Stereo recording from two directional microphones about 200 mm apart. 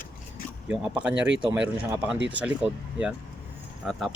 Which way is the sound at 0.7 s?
5° right (ahead or behind).